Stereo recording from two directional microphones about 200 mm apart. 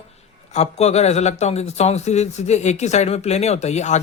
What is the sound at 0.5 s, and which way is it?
A man's voice, 35° left (ahead or behind).